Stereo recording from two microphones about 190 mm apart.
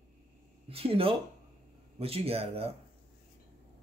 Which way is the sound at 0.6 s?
30° right (ahead or behind).